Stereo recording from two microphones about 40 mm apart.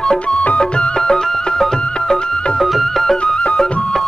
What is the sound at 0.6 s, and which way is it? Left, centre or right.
Music, centre.